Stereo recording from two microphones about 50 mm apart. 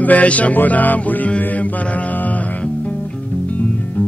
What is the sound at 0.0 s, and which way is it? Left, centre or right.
Music, left.